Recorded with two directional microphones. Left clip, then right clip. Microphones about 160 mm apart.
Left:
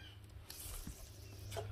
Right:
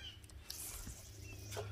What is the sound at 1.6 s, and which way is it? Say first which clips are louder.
Music: left 1 dB; 90° left.